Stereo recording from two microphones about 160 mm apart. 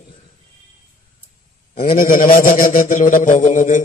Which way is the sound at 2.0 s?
55° left (ahead or behind).